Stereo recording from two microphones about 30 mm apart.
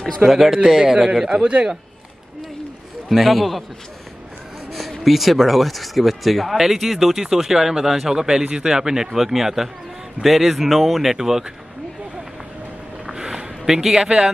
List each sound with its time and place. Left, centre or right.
0.3 s a man's voice: centre
0.7 s speech: centre
1.3 s a man's voice: right
3.1 s speech: centre
5.0 s speech: centre
6.6 s a man's voice: centre
9.1 s a man's voice: centre
11.1 s a man's voice: centre
13.0 s a sound: right
13.9 s a man's voice: right